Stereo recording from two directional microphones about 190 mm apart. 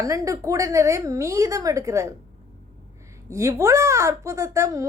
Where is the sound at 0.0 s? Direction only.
15° right (ahead or behind).